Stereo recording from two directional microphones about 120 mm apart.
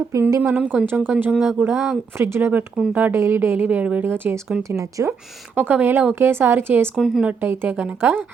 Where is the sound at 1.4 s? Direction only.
Centre (ahead or behind).